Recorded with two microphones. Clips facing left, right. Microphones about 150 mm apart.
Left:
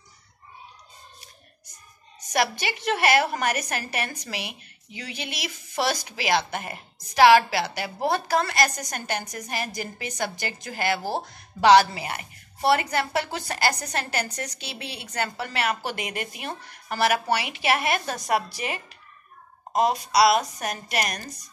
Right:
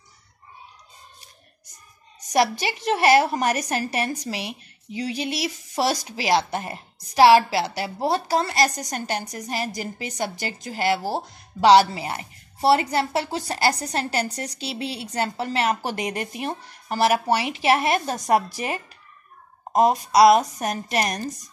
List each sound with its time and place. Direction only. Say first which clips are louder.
2.3 s a woman's voice: right 4 dB; 40° right (ahead or behind)
11.0 s speech: right 2 dB; 5° right (ahead or behind)
11.6 s a woman's voice: right 2 dB; 30° right (ahead or behind)